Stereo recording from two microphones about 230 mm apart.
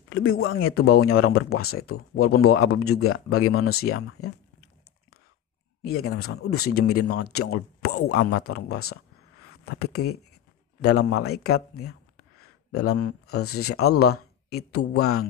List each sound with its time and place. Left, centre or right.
0.1 s speech: left
5.9 s speech: left
9.4 s a sound: left
10.0 s speech: left
10.8 s speech: left